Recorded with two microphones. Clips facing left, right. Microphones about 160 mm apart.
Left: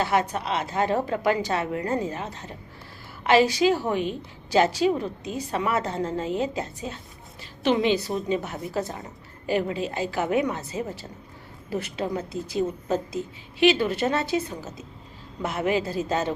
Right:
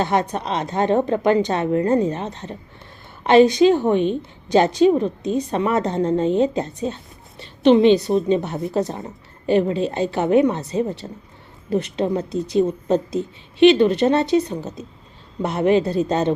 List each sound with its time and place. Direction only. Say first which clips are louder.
0.0 s a woman's voice: right 3 dB; 30° right (ahead or behind)
3.2 s a woman's voice: right 7 dB; 30° right (ahead or behind)
15.4 s a woman's voice: right 7 dB; 30° right (ahead or behind)